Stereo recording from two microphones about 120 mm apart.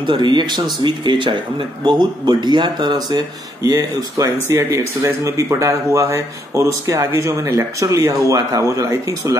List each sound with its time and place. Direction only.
0.0 s speech: 40° right (ahead or behind)